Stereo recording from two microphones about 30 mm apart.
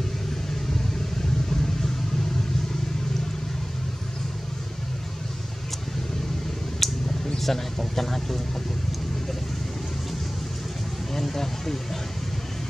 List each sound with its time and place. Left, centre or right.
1.5 s vehicle: centre
6.8 s a sound: centre
7.3 s a man's voice: centre
11.1 s a man's voice: centre